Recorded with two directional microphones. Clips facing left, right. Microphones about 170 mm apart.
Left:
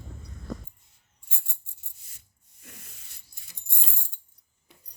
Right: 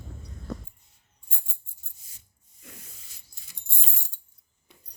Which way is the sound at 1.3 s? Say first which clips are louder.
Even; 75° left (ahead or behind).